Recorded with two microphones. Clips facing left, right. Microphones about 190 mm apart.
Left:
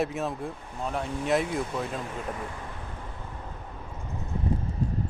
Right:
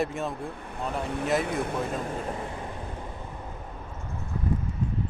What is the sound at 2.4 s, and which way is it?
Vehicle, 25° right (ahead or behind).